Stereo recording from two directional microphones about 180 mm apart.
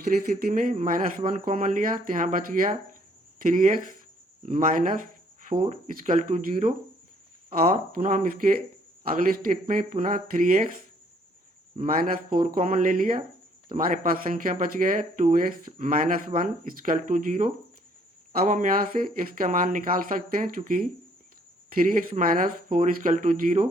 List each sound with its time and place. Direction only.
0.2 s speech: 55° right (ahead or behind)
11.8 s speech: 45° right (ahead or behind)